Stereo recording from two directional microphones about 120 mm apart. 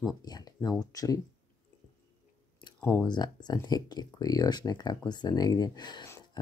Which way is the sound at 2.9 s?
35° left (ahead or behind).